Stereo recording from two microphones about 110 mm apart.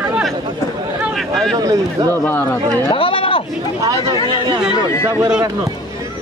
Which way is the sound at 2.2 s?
20° left (ahead or behind).